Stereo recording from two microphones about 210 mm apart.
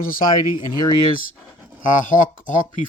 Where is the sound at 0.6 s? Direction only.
20° left (ahead or behind).